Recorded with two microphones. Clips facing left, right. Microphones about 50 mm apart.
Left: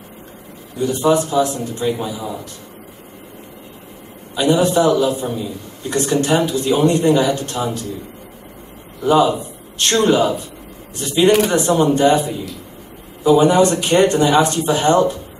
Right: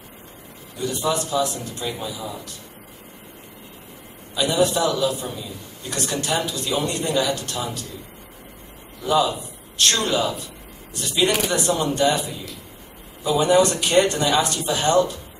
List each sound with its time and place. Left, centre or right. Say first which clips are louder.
0.7 s speech: left 8 dB; left
4.4 s speech: left 5 dB; left
9.0 s a man's voice: left 6 dB; left